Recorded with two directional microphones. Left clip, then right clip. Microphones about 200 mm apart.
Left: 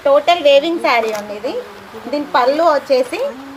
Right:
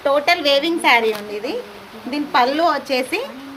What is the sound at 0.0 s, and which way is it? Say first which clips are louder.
A woman's voice: left 5 dB; 50° right (ahead or behind).